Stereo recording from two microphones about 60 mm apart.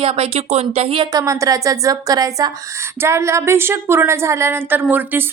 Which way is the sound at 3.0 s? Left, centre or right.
Right.